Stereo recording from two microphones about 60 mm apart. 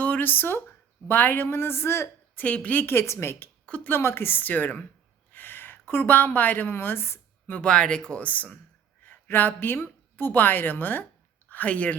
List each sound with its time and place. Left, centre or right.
0.0 s a sound: left
1.0 s a woman's voice: left
2.3 s a woman's voice: left
2.8 s a woman's voice: left
5.3 s a sound: left
7.5 s speech: centre
8.2 s a woman's voice: left